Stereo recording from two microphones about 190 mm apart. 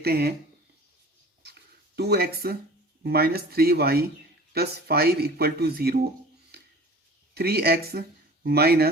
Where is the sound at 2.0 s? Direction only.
55° right (ahead or behind).